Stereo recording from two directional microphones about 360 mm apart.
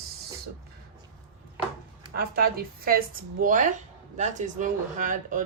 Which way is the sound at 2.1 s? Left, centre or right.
Right.